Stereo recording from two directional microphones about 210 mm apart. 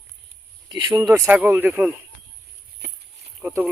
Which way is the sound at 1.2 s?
5° right (ahead or behind).